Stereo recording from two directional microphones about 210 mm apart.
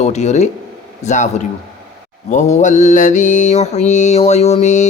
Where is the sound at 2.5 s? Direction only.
35° left (ahead or behind).